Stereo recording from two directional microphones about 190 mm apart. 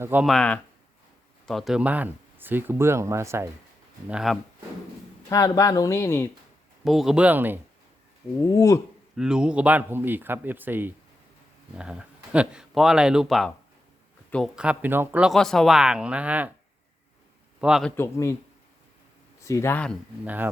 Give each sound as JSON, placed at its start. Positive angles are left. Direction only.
{"t": 0.0, "sound": "speech", "side_deg": -10}
{"t": 4.1, "sound": "speech", "side_deg": 0}
{"t": 5.3, "sound": "speech", "side_deg": 20}
{"t": 6.8, "sound": "speech", "side_deg": 0}
{"t": 8.4, "sound": "speech", "side_deg": 15}
{"t": 9.1, "sound": "speech", "side_deg": -5}
{"t": 14.5, "sound": "speech", "side_deg": -5}
{"t": 17.6, "sound": "speech", "side_deg": 0}
{"t": 17.9, "sound": "speech", "side_deg": 15}
{"t": 19.5, "sound": "speech", "side_deg": 15}
{"t": 20.2, "sound": "speech", "side_deg": -10}